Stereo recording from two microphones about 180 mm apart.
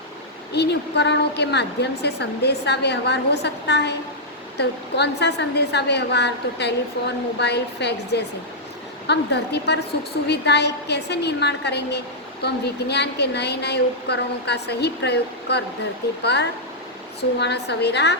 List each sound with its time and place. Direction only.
0.5 s a woman's voice: 70° left (ahead or behind)